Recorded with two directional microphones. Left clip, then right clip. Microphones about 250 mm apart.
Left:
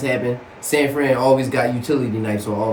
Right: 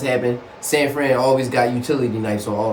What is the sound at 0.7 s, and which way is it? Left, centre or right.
Speech, centre.